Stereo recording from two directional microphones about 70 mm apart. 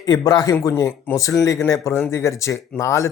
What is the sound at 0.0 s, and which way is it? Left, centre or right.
Speech, left.